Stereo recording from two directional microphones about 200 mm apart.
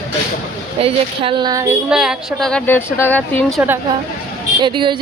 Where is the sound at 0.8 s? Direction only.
25° right (ahead or behind).